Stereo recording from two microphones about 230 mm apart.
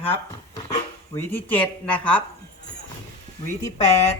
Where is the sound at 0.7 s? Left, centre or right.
Centre.